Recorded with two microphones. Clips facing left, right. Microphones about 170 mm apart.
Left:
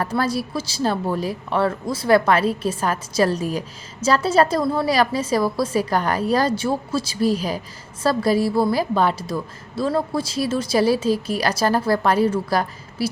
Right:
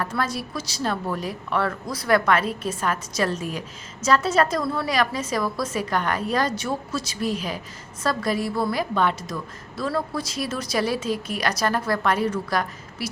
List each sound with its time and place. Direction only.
0.0 s a woman's voice: 35° left (ahead or behind)